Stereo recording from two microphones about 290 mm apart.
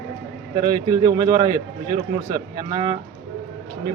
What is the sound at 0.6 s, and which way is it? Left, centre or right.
A man's voice, centre.